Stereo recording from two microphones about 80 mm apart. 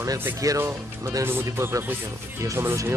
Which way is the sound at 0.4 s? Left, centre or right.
Right.